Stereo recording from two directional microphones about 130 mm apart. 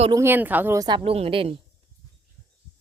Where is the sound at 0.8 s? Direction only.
35° right (ahead or behind).